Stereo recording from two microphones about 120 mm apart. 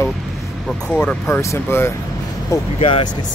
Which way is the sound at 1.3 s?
25° left (ahead or behind).